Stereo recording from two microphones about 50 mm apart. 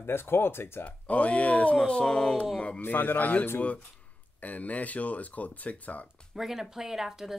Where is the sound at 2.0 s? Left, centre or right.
Centre.